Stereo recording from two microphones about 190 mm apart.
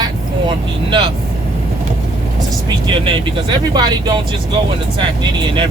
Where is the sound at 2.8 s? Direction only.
25° right (ahead or behind).